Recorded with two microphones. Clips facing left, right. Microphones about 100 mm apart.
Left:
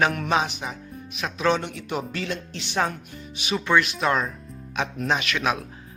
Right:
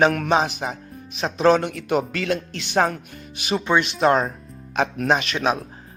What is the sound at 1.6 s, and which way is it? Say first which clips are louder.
Speech: right 7 dB; 60° right (ahead or behind).